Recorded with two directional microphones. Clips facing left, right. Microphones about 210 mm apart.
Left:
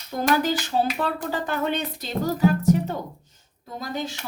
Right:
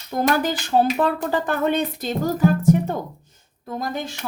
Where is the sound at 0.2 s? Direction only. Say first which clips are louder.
Right 1 dB; 50° right (ahead or behind).